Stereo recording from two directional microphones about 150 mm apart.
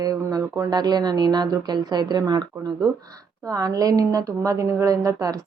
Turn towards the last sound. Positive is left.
turn(degrees=-25)  # may be behind; listen again after turning